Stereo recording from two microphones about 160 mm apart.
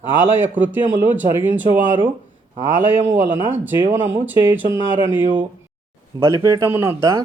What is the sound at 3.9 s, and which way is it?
A man's voice, 10° right (ahead or behind).